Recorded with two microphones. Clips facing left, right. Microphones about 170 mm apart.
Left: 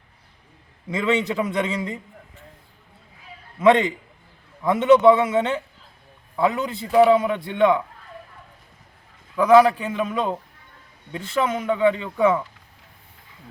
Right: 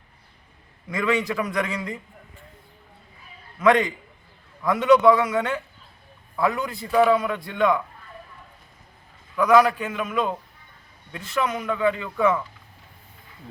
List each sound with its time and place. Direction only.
0.9 s a man's voice: 25° left (ahead or behind)
3.6 s a man's voice: 25° left (ahead or behind)
9.3 s a man's voice: 30° left (ahead or behind)